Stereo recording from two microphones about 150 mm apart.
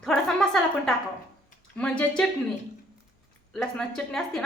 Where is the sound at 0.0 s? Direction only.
Centre (ahead or behind).